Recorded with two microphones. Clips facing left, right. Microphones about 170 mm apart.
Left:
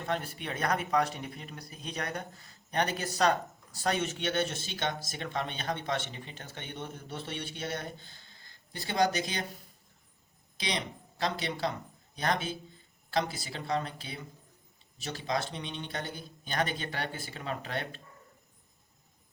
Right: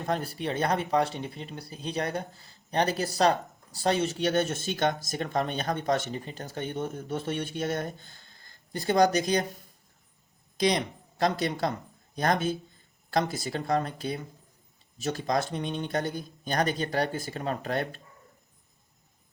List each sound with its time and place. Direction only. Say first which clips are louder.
0.0 s speech: right 4 dB; 40° right (ahead or behind)
10.6 s speech: right 9 dB; 45° right (ahead or behind)